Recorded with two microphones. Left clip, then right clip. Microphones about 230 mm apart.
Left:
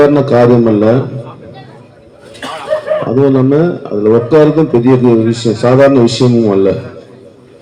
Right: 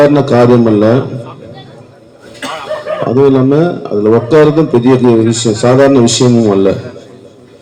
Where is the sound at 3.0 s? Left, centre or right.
Right.